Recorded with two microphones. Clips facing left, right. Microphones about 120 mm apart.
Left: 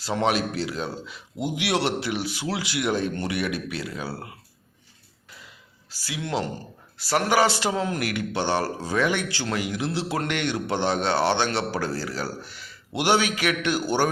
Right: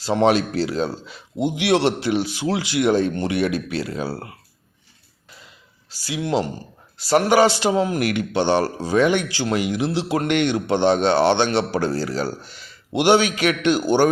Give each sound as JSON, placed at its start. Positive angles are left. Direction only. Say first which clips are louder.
{"t": 0.0, "sound": "a man's voice", "louder": "right 6 dB", "side_deg": -25}
{"t": 5.9, "sound": "a man's voice", "louder": "right 6 dB", "side_deg": -25}